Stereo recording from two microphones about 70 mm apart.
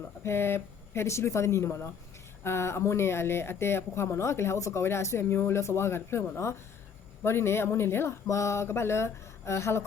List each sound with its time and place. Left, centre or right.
0.3 s speech: left